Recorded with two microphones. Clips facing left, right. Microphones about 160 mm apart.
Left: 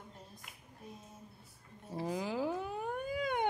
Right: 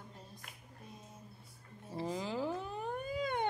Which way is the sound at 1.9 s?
10° left (ahead or behind).